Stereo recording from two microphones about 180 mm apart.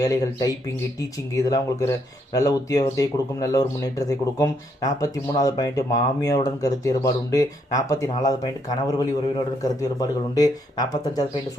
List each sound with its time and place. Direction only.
0.0 s speech: 20° left (ahead or behind)
10.0 s speech: 20° left (ahead or behind)